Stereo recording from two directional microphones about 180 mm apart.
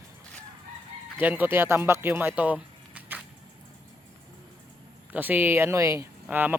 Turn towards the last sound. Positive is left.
turn(degrees=-10)  # may be behind; listen again after turning